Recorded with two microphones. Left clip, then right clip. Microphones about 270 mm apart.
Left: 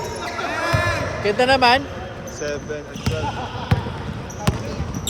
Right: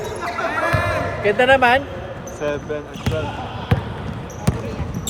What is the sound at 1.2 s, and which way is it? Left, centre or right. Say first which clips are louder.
Speech: right 2 dB; centre.